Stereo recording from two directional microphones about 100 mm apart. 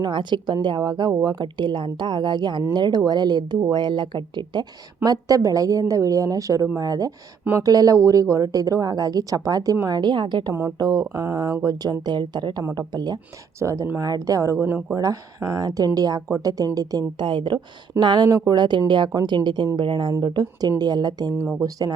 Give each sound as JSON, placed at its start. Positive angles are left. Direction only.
{"t": 0.0, "sound": "speech", "side_deg": -50}
{"t": 5.0, "sound": "a woman's voice", "side_deg": -40}
{"t": 13.6, "sound": "a woman's voice", "side_deg": -30}
{"t": 18.3, "sound": "a woman's voice", "side_deg": -40}